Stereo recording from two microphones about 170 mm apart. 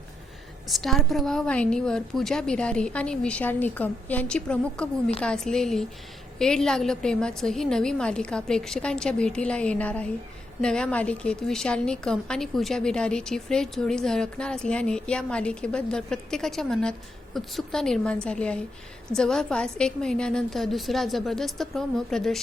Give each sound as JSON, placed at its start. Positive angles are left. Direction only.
{"t": 0.7, "sound": "a woman's voice", "side_deg": 0}